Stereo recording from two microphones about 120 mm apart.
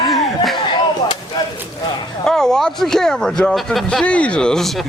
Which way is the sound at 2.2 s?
5° left (ahead or behind).